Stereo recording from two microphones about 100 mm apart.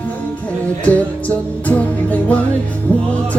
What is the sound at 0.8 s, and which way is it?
Music, 15° left (ahead or behind).